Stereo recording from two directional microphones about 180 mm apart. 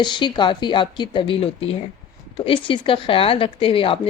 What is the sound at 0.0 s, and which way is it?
Speech, 25° left (ahead or behind).